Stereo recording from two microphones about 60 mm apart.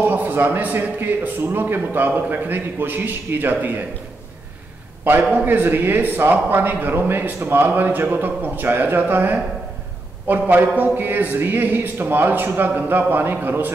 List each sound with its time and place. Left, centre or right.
0.0 s a man's voice: right
5.0 s a man's voice: right